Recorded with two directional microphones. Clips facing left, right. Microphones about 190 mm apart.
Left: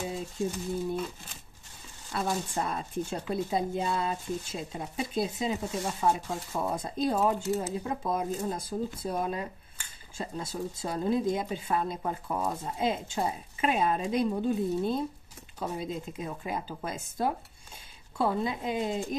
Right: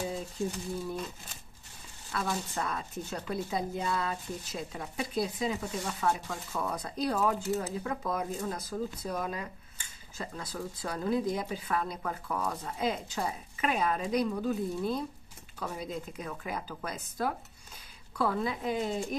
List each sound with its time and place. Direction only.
2.1 s speech: 25° left (ahead or behind)